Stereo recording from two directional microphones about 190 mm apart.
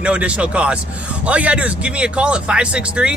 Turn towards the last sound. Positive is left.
turn(degrees=-5)  # may be behind; listen again after turning